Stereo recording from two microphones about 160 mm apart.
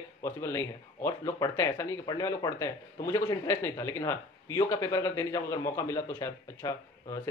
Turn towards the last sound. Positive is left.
turn(degrees=20)  # may be behind; listen again after turning